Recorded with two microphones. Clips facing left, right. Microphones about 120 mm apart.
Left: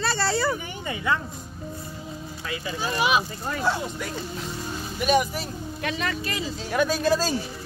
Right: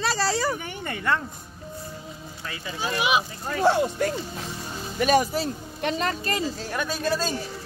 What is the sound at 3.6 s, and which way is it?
Speech, 65° right (ahead or behind).